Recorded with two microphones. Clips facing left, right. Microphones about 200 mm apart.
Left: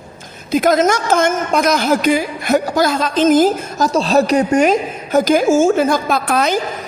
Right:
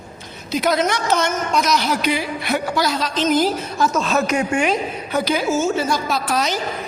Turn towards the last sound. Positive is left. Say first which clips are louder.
# left 5 dB
turn(degrees=55)  # may be behind; listen again after turning